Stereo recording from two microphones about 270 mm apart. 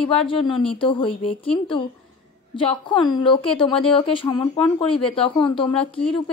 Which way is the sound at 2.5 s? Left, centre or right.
Centre.